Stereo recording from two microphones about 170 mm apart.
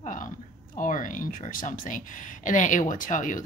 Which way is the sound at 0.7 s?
50° left (ahead or behind).